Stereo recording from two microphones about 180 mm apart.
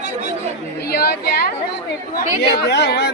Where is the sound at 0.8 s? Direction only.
60° left (ahead or behind).